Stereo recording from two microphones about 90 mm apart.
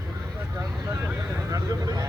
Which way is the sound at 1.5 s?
40° right (ahead or behind).